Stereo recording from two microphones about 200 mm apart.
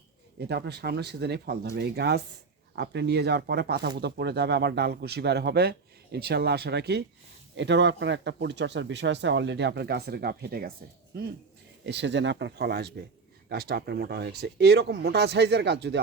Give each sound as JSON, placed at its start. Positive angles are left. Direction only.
{"t": 0.3, "sound": "speech", "side_deg": -55}
{"t": 11.9, "sound": "speech", "side_deg": -60}